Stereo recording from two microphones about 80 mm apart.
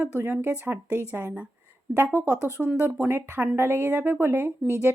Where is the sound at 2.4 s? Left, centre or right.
Right.